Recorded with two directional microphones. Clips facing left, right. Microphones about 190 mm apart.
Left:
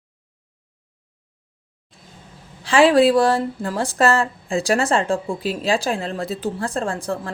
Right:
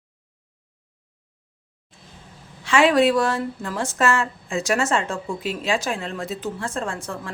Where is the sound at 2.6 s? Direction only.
35° left (ahead or behind).